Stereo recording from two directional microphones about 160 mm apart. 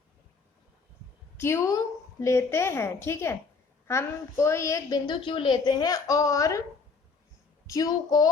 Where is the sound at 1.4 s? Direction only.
20° left (ahead or behind).